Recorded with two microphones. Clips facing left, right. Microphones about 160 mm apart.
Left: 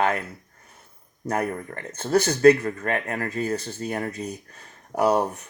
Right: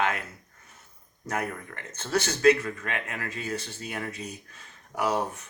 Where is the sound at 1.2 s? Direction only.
35° left (ahead or behind).